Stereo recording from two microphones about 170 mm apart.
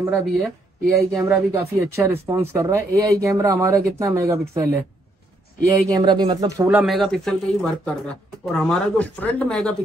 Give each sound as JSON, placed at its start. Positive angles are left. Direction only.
{"t": 0.0, "sound": "speech", "side_deg": -15}
{"t": 5.9, "sound": "speech", "side_deg": -25}
{"t": 6.8, "sound": "speech", "side_deg": 0}